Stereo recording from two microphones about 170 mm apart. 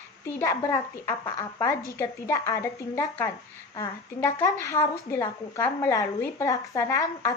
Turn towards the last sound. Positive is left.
turn(degrees=20)  # may be behind; listen again after turning